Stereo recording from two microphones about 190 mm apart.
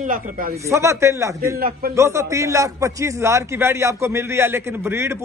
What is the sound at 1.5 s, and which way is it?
Speech, 50° right (ahead or behind).